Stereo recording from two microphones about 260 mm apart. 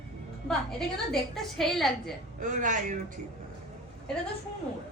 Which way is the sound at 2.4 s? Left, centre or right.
Right.